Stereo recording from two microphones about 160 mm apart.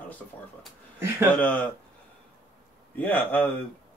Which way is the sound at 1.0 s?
15° right (ahead or behind).